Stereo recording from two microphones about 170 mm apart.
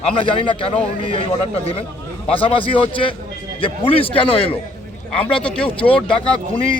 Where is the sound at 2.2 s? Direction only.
30° left (ahead or behind).